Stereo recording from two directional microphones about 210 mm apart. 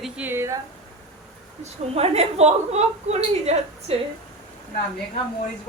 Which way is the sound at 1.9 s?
30° right (ahead or behind).